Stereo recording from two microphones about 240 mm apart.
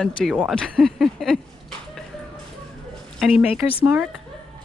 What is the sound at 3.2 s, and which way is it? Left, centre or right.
Speech, centre.